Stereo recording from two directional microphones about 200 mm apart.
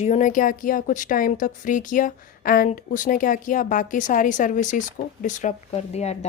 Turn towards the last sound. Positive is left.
turn(degrees=35)  # may be behind; listen again after turning